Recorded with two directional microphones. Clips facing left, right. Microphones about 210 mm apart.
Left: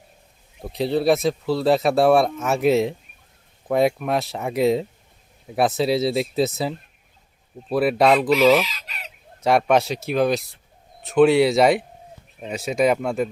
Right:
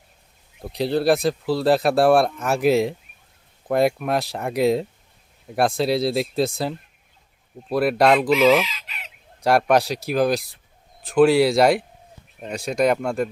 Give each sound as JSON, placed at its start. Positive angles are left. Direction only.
{"t": 0.6, "sound": "speech", "side_deg": 0}
{"t": 7.7, "sound": "speech", "side_deg": 0}
{"t": 8.6, "sound": "chicken", "side_deg": 40}
{"t": 9.4, "sound": "speech", "side_deg": 0}